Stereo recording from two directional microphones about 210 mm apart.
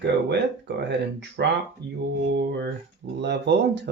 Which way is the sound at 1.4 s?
55° right (ahead or behind).